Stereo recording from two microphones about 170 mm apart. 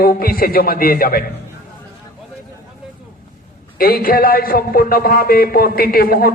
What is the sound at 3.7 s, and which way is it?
A man's voice, 60° left (ahead or behind).